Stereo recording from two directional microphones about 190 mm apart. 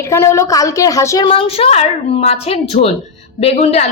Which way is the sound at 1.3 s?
30° left (ahead or behind).